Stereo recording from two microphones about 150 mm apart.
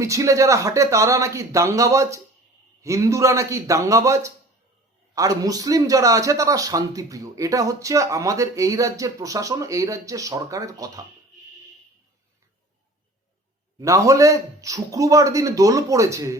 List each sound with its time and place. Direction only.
0.0 s a man's voice: 20° right (ahead or behind)
13.7 s a man's voice: 20° right (ahead or behind)